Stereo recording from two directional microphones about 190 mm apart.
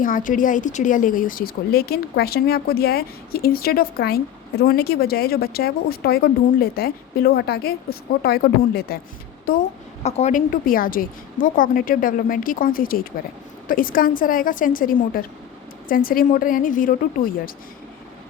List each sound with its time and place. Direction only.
0.0 s a woman's voice: 45° left (ahead or behind)
9.5 s a woman's voice: 40° left (ahead or behind)